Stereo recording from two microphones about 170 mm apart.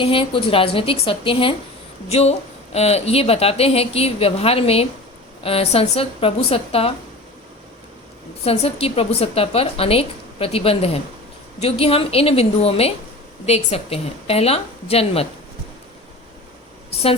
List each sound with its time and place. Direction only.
0.0 s a woman's voice: 30° left (ahead or behind)
8.4 s a woman's voice: 35° left (ahead or behind)